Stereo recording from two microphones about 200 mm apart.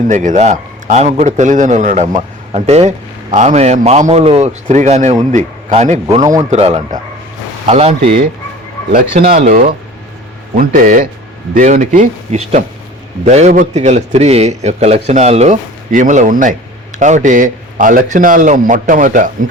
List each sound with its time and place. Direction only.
0.1 s a man's voice: 35° right (ahead or behind)
8.9 s speech: 45° right (ahead or behind)
9.4 s a man's voice: 35° right (ahead or behind)
10.5 s a man's voice: 45° right (ahead or behind)